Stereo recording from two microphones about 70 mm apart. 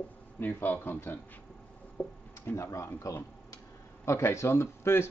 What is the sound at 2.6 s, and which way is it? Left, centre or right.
Speech, left.